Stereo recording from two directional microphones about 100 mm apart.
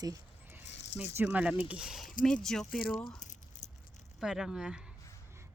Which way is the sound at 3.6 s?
35° left (ahead or behind).